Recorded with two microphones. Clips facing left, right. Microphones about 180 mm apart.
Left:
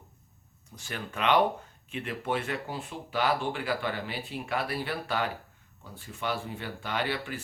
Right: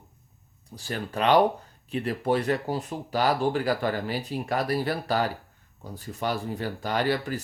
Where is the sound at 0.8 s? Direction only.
35° right (ahead or behind).